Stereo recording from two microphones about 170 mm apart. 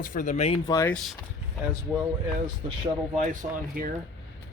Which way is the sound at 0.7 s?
20° left (ahead or behind).